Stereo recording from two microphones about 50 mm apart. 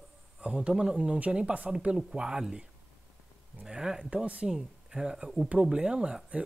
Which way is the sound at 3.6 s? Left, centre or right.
Centre.